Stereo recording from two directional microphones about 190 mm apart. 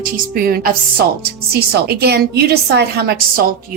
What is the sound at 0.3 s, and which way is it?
A woman's voice, 50° right (ahead or behind).